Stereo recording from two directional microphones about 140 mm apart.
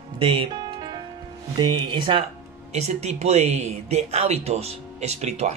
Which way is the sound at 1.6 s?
35° right (ahead or behind).